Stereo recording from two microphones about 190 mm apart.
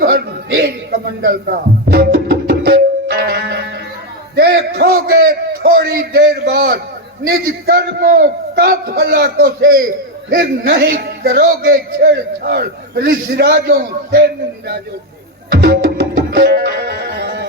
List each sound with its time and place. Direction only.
0.0 s music: 55° right (ahead or behind)
4.4 s a man's voice: 55° right (ahead or behind)
15.4 s music: 55° right (ahead or behind)